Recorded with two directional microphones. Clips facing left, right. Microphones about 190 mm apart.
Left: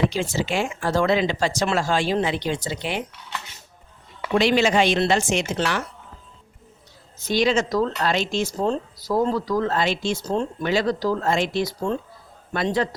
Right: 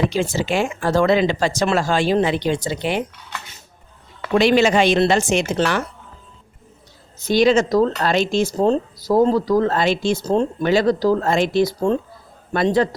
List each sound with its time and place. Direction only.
0.1 s speech: 50° right (ahead or behind)
4.4 s speech: 50° right (ahead or behind)
7.3 s a man's voice: 45° right (ahead or behind)